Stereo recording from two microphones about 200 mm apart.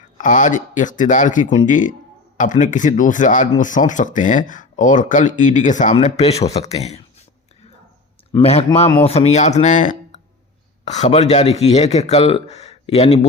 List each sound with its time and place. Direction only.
0.2 s speech: 40° left (ahead or behind)
8.4 s speech: 30° left (ahead or behind)